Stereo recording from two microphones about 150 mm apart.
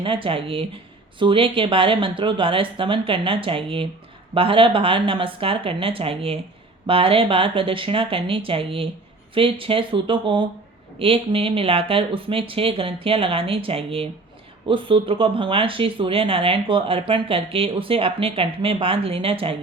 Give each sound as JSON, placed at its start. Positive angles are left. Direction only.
{"t": 0.0, "sound": "speech", "side_deg": -35}